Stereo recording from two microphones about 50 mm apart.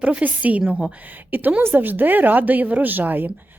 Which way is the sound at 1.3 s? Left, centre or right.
Right.